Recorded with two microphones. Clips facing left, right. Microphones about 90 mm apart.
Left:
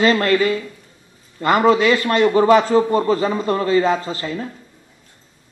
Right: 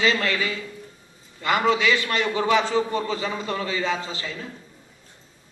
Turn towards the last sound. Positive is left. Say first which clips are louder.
# left 7 dB
turn(degrees=45)  # may be behind; listen again after turning